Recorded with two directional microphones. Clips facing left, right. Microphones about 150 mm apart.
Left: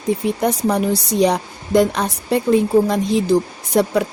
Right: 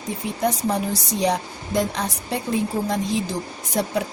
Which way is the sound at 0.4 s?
65° left (ahead or behind).